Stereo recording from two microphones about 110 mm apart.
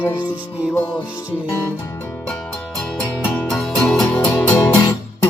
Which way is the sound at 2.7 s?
5° left (ahead or behind).